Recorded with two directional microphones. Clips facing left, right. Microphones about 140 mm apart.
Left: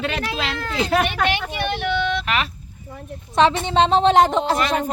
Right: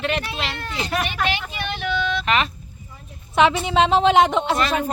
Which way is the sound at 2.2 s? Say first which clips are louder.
Right 2 dB; 5° left (ahead or behind).